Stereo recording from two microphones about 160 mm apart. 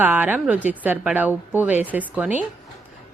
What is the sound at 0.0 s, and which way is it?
A woman's voice, 10° right (ahead or behind).